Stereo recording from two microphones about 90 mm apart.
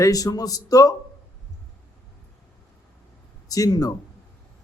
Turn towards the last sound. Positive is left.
turn(degrees=45)  # may be behind; listen again after turning